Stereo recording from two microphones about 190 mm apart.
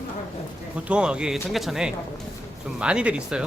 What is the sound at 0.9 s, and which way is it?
Speech, 5° right (ahead or behind).